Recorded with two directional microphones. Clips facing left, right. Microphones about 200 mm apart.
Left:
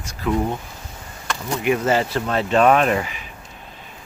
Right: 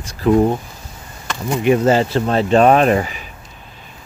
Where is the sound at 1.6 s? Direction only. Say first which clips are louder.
Right 5 dB; 30° right (ahead or behind).